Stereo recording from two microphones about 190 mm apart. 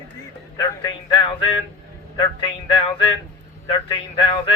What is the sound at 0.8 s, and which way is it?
Speech, 25° left (ahead or behind).